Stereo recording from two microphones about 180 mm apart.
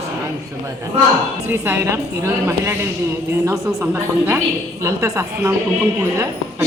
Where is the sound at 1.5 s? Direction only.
10° right (ahead or behind).